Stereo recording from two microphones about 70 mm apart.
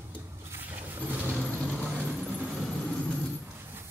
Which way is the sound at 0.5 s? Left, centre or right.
Right.